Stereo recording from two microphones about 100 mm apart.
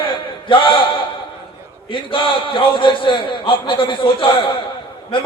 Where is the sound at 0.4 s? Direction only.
60° left (ahead or behind).